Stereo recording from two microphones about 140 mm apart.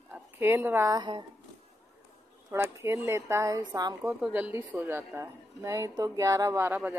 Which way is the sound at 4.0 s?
10° right (ahead or behind).